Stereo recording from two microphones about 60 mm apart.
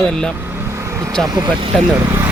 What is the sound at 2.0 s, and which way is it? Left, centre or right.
Vehicle, right.